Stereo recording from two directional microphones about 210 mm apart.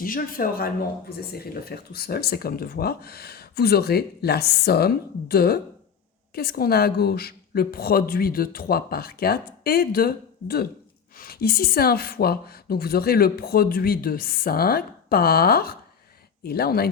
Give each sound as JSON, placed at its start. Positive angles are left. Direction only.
{"t": 0.0, "sound": "speech", "side_deg": 45}